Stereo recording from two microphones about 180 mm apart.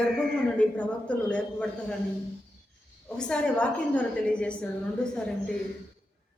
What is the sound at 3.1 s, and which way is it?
A woman's voice, 5° left (ahead or behind).